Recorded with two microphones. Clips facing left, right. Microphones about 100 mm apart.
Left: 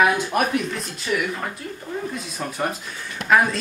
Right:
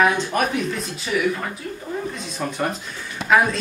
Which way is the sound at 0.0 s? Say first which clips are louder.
Even; 5° left (ahead or behind).